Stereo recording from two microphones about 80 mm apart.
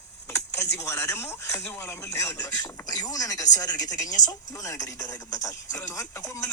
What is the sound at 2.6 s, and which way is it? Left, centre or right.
Speech, left.